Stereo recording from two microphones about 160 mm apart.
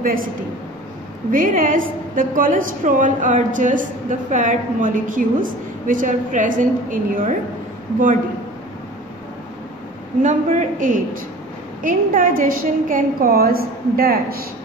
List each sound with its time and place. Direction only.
0.0 s a woman's voice: 60° right (ahead or behind)
1.3 s a woman's voice: 60° right (ahead or behind)
10.2 s a woman's voice: 50° right (ahead or behind); by 14.4 s 70° right (ahead or behind)